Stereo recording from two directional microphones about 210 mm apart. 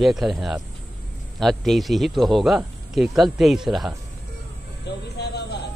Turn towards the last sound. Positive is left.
turn(degrees=50)  # may be behind; listen again after turning